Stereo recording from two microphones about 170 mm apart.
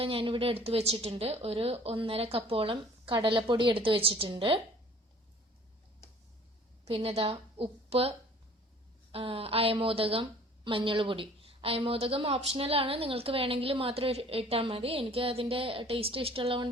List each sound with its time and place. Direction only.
0.0 s a woman's voice: 30° right (ahead or behind)
6.8 s a woman's voice: 35° right (ahead or behind)
9.1 s a woman's voice: 35° right (ahead or behind)